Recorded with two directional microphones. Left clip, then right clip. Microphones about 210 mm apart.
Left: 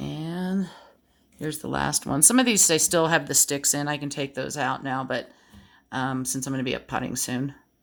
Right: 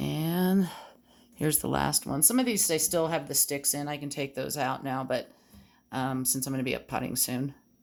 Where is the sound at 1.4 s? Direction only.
20° right (ahead or behind).